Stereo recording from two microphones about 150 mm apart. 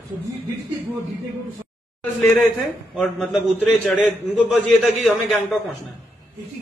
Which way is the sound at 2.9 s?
Centre (ahead or behind).